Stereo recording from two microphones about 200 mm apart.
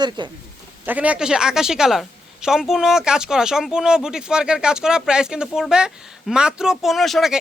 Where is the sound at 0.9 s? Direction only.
5° right (ahead or behind).